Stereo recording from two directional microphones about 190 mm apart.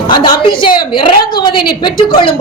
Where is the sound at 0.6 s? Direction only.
25° left (ahead or behind).